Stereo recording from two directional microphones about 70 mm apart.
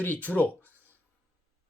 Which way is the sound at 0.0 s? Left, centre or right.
Left.